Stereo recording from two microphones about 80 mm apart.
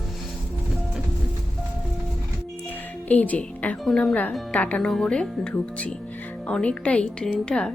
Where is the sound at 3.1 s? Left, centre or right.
Centre.